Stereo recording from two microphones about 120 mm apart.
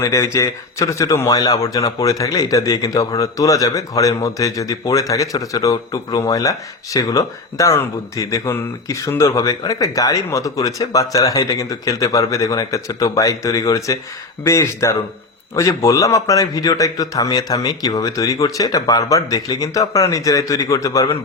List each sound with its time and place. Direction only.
0.0 s speech: 25° left (ahead or behind)